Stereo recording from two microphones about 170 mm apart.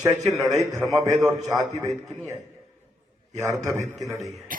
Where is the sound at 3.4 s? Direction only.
20° right (ahead or behind).